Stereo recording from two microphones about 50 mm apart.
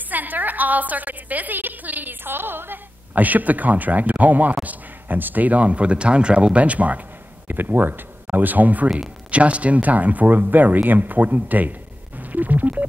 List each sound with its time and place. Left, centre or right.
0.1 s a woman's voice: right
7.4 s a woman's voice: right
12.2 s telephone dialing: right